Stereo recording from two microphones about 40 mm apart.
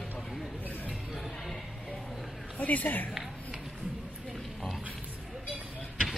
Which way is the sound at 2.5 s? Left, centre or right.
Left.